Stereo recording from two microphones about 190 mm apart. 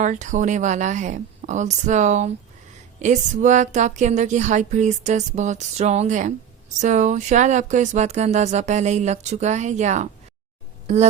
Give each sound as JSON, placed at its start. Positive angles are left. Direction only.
{"t": 0.0, "sound": "speech", "side_deg": -40}